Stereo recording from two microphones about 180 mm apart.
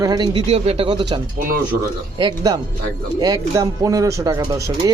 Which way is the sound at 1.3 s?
50° right (ahead or behind).